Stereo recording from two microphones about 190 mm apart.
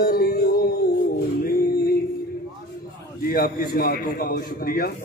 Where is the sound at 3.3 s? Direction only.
50° left (ahead or behind).